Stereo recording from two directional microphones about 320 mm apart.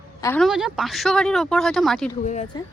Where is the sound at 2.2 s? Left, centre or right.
Left.